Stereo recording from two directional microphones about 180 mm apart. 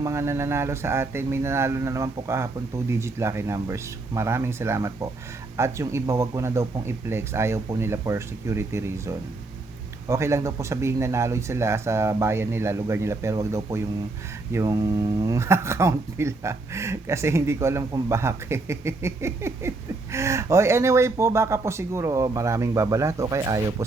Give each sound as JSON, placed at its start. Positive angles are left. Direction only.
{"t": 0.0, "sound": "speech", "side_deg": -15}